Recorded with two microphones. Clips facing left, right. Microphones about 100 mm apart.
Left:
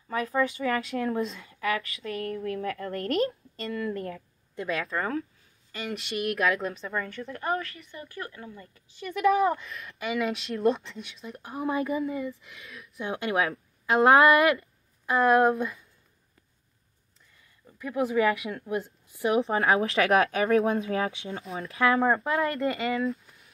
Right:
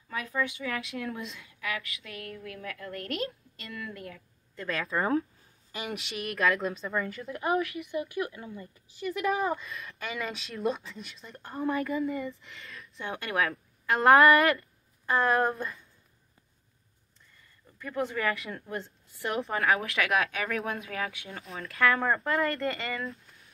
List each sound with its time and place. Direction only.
0.1 s a woman's voice: 35° left (ahead or behind)
4.6 s speech: 10° left (ahead or behind)
5.7 s speech: 15° right (ahead or behind)
5.9 s speech: centre (ahead or behind)
8.5 s speech: 5° right (ahead or behind); by 12.0 s 15° left (ahead or behind)
12.0 s speech: 5° left (ahead or behind)
13.1 s a woman's voice: 25° left (ahead or behind); by 15.8 s 5° left (ahead or behind)
17.7 s a woman's voice: 10° left (ahead or behind)